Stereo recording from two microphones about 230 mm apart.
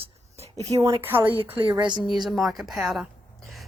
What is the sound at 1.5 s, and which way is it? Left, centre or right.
Speech, right.